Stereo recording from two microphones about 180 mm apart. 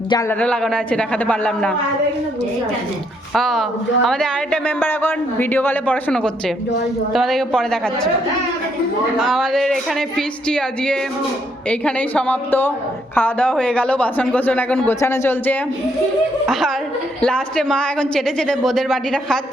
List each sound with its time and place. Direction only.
0.3 s a man's voice: 5° left (ahead or behind)
3.3 s a woman's voice: centre (ahead or behind)
9.1 s a woman's voice: centre (ahead or behind)
16.5 s a woman's voice: centre (ahead or behind)